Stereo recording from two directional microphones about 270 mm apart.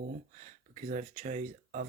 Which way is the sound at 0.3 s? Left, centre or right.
Right.